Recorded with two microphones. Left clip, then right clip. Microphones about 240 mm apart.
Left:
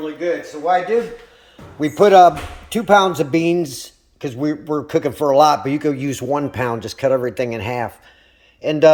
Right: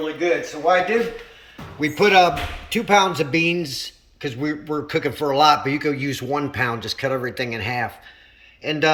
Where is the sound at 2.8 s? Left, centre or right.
Left.